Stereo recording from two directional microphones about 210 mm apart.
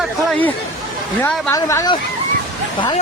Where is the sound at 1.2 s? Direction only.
15° left (ahead or behind).